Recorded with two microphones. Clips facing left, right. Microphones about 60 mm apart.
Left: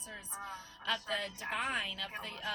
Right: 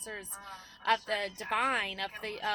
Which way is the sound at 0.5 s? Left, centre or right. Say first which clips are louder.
Right 9 dB; right.